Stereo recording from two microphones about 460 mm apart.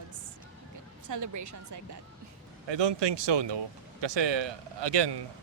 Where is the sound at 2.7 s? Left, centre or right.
Right.